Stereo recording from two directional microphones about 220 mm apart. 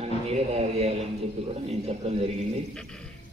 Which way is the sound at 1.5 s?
30° right (ahead or behind).